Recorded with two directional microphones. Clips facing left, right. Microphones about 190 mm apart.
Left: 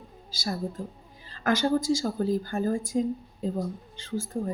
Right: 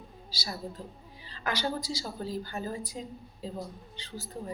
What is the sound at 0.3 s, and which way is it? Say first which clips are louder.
A woman's voice: left 7 dB; 50° left (ahead or behind).